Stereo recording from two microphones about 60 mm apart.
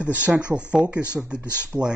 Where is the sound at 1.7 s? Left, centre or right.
Centre.